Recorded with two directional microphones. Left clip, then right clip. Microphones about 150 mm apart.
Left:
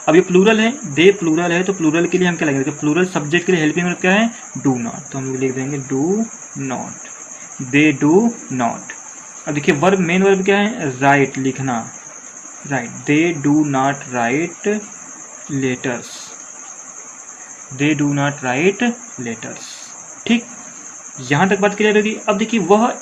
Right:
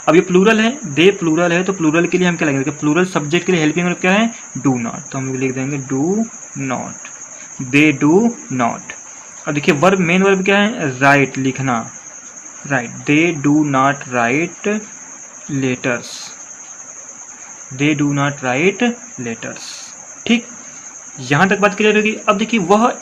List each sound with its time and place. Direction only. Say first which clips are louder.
0.0 s speech: even; 25° right (ahead or behind)
7.7 s speech: right 1 dB; 25° right (ahead or behind)
17.7 s speech: right 1 dB; 20° right (ahead or behind)